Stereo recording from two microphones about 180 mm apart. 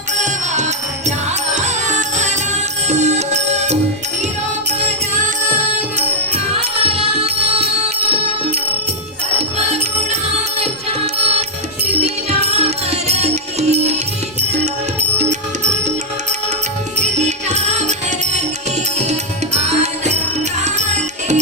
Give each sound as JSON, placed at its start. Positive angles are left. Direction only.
{"t": 1.5, "sound": "music", "side_deg": -40}
{"t": 6.0, "sound": "music", "side_deg": -35}
{"t": 10.6, "sound": "music", "side_deg": -35}
{"t": 15.2, "sound": "music", "side_deg": -40}
{"t": 17.0, "sound": "music", "side_deg": -40}
{"t": 19.5, "sound": "music", "side_deg": -40}